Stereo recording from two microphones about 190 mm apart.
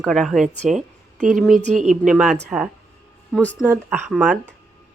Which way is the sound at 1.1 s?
40° right (ahead or behind).